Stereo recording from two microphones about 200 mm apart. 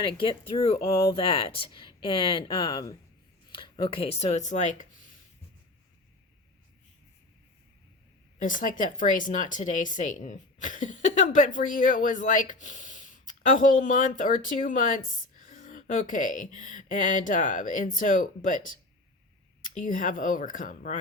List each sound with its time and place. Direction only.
0.0 s speech: 25° left (ahead or behind)
8.4 s speech: 40° left (ahead or behind)